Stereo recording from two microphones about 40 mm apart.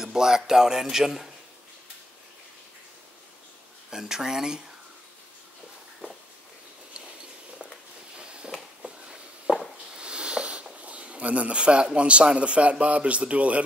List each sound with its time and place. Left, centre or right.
0.0 s speech: centre
3.9 s speech: centre
8.2 s a sound: right
9.9 s speech: right